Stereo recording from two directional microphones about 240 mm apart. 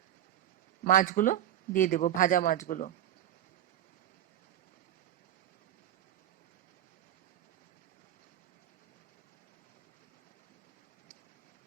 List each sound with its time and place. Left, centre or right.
0.9 s speech: left